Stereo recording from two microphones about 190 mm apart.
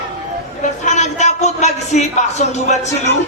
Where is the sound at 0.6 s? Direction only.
40° left (ahead or behind).